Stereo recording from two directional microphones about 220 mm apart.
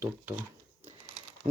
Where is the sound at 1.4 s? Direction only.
30° right (ahead or behind).